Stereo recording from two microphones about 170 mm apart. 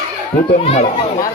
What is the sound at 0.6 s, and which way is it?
Speech, 40° left (ahead or behind).